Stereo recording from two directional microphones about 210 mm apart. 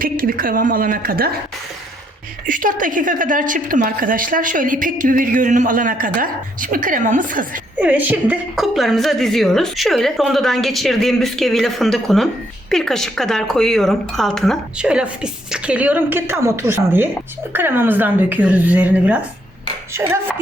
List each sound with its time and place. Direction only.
0.0 s a woman's voice: 45° right (ahead or behind)
2.5 s a woman's voice: 40° right (ahead or behind)
7.8 s a woman's voice: 10° right (ahead or behind)